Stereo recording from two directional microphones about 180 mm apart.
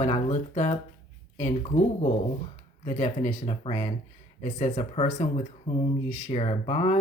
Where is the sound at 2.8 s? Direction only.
40° left (ahead or behind).